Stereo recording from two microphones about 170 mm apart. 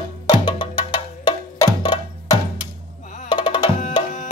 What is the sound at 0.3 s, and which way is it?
Music, 25° left (ahead or behind).